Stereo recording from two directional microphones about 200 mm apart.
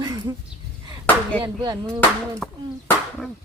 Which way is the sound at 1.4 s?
15° right (ahead or behind).